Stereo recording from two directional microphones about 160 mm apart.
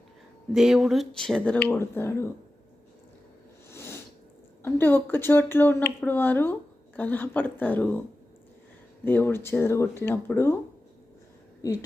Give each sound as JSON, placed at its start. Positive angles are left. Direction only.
{"t": 0.5, "sound": "speech", "side_deg": 0}
{"t": 3.7, "sound": "a sound", "side_deg": 15}
{"t": 4.6, "sound": "speech", "side_deg": 15}
{"t": 9.0, "sound": "speech", "side_deg": 15}